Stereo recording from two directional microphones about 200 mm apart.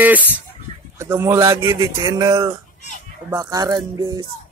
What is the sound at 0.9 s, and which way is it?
Speech, 15° right (ahead or behind).